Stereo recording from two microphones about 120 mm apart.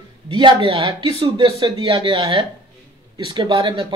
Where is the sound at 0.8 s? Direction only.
40° right (ahead or behind).